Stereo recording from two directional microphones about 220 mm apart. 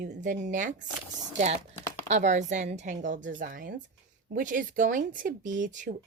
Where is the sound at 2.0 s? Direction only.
30° right (ahead or behind).